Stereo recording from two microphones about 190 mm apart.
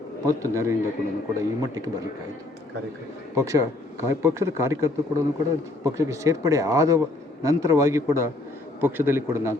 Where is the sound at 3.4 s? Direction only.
15° right (ahead or behind).